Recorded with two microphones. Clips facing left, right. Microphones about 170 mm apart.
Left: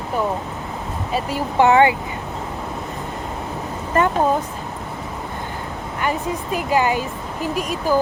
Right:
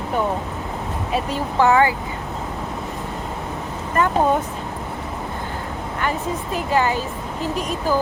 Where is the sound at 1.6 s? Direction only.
20° left (ahead or behind).